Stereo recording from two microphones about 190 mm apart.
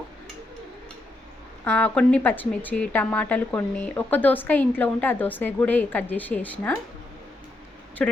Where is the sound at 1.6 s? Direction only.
10° left (ahead or behind).